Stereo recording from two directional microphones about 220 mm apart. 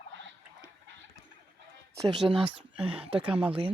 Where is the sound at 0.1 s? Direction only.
60° right (ahead or behind).